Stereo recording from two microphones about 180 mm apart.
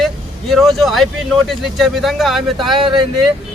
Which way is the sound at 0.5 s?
Centre (ahead or behind).